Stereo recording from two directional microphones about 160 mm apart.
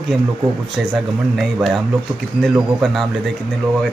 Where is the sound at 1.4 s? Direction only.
Centre (ahead or behind).